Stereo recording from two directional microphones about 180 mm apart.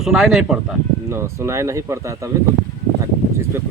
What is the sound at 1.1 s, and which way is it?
Speech, 15° right (ahead or behind).